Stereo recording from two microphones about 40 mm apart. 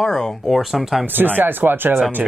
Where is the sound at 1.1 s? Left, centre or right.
Right.